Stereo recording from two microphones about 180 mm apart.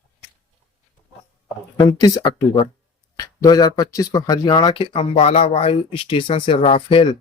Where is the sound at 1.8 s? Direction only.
20° left (ahead or behind).